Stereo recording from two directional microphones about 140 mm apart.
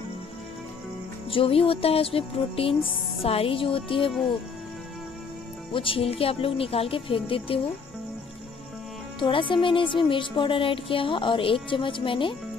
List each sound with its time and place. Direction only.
1.3 s a woman's voice: 40° left (ahead or behind)
5.7 s a woman's voice: 40° left (ahead or behind)
9.2 s a woman's voice: 35° left (ahead or behind)